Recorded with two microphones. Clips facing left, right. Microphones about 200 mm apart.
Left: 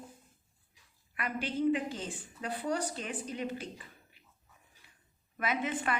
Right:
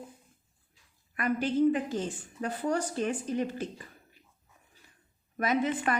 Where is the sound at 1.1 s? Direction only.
45° right (ahead or behind).